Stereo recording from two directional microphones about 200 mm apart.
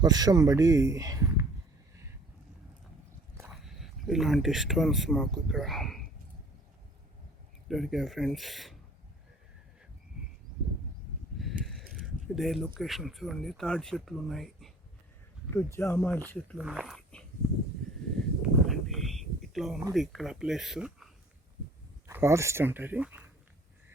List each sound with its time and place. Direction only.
0.0 s speech: 20° right (ahead or behind)
3.4 s speech: centre (ahead or behind)
7.7 s speech: centre (ahead or behind)
11.3 s a sound: centre (ahead or behind)
11.9 s speech: centre (ahead or behind)
15.5 s speech: 10° left (ahead or behind)
16.6 s speech: 5° right (ahead or behind)
18.2 s a sound: centre (ahead or behind)
19.9 s speech: centre (ahead or behind)